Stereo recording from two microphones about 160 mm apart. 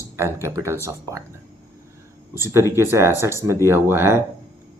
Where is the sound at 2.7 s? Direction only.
15° right (ahead or behind).